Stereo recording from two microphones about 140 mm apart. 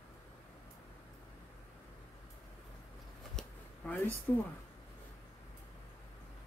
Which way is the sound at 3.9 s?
10° left (ahead or behind).